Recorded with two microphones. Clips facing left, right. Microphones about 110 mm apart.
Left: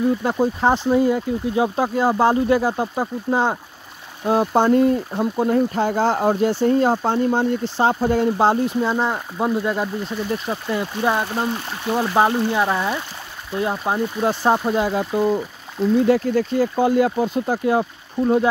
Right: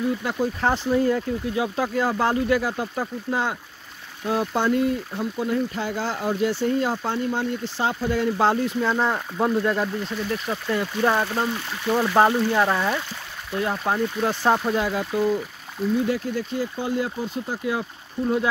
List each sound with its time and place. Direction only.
0.2 s speech: 30° left (ahead or behind)
0.6 s speech: 20° left (ahead or behind)
1.6 s speech: 30° left (ahead or behind)
8.6 s speech: 15° left (ahead or behind)
14.8 s speech: 30° left (ahead or behind)
16.1 s speech: 65° left (ahead or behind)